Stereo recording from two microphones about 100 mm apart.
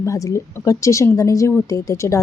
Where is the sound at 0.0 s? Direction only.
30° left (ahead or behind).